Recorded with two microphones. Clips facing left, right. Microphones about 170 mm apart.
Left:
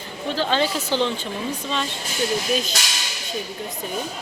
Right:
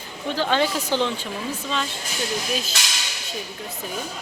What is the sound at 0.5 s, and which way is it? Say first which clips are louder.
Speech: right 1 dB; 10° right (ahead or behind).